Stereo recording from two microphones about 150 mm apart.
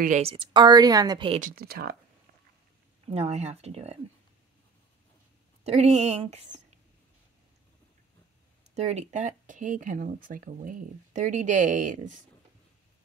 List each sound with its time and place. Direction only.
0.2 s a woman's voice: 35° right (ahead or behind)
1.4 s speech: 85° right
3.1 s a woman's voice: 45° right (ahead or behind)
5.6 s a woman's voice: 45° right (ahead or behind)
8.7 s speech: 45° right (ahead or behind)